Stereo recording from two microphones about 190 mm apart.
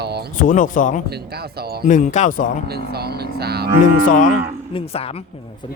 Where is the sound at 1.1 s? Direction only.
55° right (ahead or behind).